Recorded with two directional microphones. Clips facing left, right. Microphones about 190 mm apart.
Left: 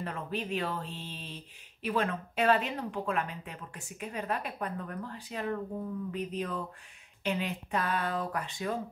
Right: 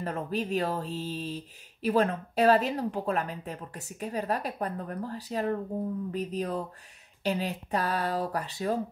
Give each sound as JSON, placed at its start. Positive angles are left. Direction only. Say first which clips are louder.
{"t": 0.0, "sound": "speech", "louder": "right 4 dB", "side_deg": -40}